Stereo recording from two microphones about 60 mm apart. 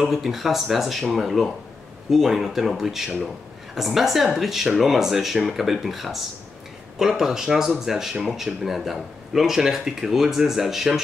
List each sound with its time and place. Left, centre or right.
0.0 s a man's voice: centre